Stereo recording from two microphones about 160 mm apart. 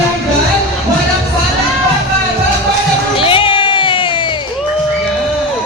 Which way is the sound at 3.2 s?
35° left (ahead or behind).